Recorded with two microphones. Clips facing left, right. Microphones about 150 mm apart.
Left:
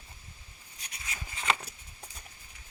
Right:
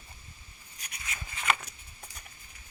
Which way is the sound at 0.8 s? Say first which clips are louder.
Right 1 dB; 25° left (ahead or behind).